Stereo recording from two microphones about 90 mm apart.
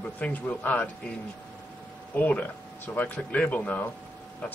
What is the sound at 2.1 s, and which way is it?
Speech, 20° left (ahead or behind).